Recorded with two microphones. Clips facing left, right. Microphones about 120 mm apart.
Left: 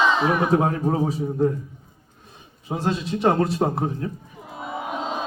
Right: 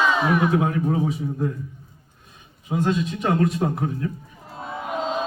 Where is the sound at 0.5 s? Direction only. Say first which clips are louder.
Left 1 dB; 35° left (ahead or behind).